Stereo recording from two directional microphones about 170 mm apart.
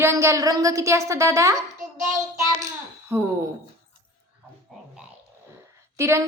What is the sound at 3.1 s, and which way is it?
Speech, 15° right (ahead or behind).